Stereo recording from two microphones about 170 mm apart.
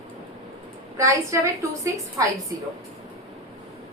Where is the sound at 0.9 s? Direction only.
20° right (ahead or behind).